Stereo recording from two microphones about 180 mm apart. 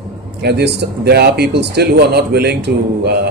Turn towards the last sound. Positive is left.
turn(degrees=-65)  # may be behind; listen again after turning